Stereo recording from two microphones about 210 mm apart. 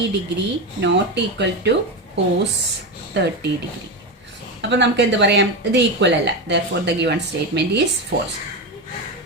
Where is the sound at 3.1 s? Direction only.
55° right (ahead or behind).